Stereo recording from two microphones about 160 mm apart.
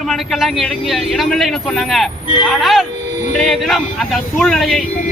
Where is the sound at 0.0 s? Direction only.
Centre (ahead or behind).